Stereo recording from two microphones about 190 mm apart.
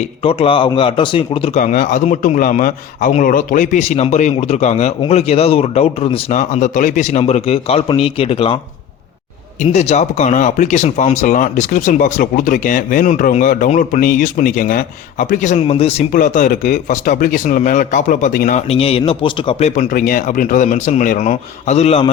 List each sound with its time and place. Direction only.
0.2 s a man's voice: 30° left (ahead or behind)
6.3 s a man's voice: 40° left (ahead or behind)
9.6 s speech: 35° left (ahead or behind)
16.1 s a man's voice: 45° left (ahead or behind)